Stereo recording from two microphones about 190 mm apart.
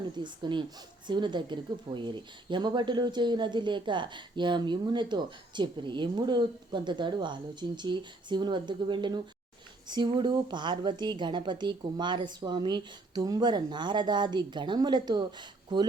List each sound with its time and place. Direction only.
0.2 s speech: 25° right (ahead or behind)